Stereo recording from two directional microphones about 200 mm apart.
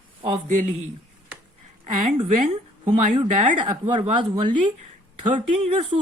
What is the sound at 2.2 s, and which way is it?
A woman's voice, 35° right (ahead or behind).